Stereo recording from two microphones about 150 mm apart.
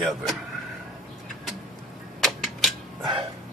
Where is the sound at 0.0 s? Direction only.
Centre (ahead or behind).